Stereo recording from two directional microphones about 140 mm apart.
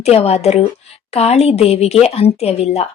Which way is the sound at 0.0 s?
45° left (ahead or behind).